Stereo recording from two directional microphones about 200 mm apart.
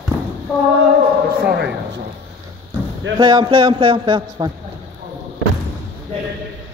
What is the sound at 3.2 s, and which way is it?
Speech, 25° right (ahead or behind).